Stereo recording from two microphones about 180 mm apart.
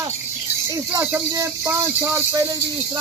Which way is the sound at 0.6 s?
15° right (ahead or behind).